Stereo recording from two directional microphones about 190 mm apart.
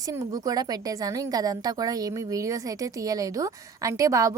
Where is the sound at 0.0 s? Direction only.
15° right (ahead or behind).